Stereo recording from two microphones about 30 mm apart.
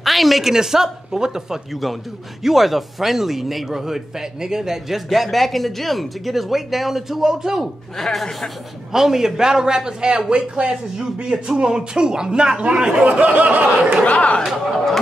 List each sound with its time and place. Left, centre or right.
0.0 s a sound: centre
0.4 s speech: centre
1.7 s speech: centre
8.0 s a man's voice: centre
8.9 s a man's voice: centre; by 13.0 s right
13.0 s a sound: right
14.1 s speech: left